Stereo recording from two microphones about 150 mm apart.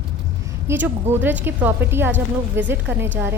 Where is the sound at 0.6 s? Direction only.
15° right (ahead or behind).